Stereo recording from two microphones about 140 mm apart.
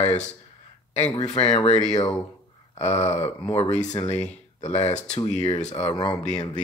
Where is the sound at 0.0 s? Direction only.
50° left (ahead or behind).